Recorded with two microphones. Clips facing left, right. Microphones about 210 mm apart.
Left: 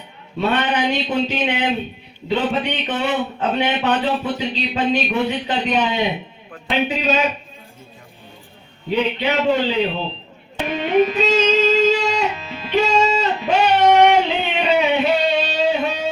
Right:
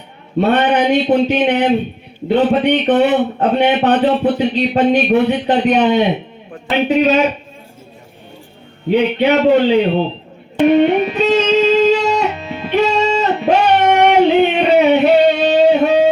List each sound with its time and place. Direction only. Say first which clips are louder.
0.3 s speech: right 7 dB; 55° right (ahead or behind)
8.9 s speech: right 7 dB; 55° right (ahead or behind)
10.7 s music: right 4 dB; 60° right (ahead or behind)
14.2 s a sound: right 9 dB; 55° right (ahead or behind)